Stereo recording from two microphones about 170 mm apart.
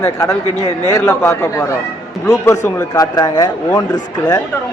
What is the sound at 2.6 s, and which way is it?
Speech, 20° left (ahead or behind).